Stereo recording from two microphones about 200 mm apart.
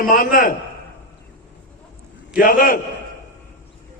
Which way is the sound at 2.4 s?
45° left (ahead or behind).